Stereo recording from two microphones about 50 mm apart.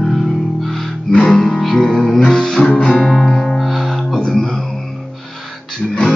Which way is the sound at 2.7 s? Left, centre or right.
Centre.